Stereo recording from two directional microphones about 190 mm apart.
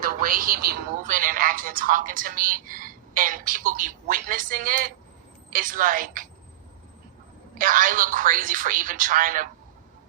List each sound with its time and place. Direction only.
0.2 s a woman's voice: 50° right (ahead or behind)
7.6 s a woman's voice: 45° right (ahead or behind)